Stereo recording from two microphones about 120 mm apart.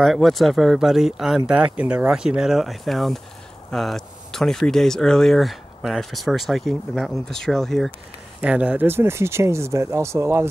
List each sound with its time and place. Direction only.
0.0 s speech: centre (ahead or behind)
8.4 s speech: 10° right (ahead or behind)